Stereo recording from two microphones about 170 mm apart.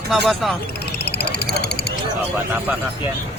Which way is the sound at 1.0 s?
75° left (ahead or behind).